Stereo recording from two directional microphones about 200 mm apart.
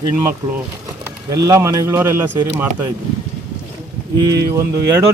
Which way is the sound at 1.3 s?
15° right (ahead or behind).